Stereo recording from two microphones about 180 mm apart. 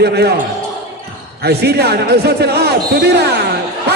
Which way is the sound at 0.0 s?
65° right (ahead or behind).